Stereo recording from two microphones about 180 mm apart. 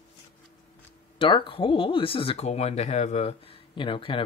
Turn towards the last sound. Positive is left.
turn(degrees=30)  # may be behind; listen again after turning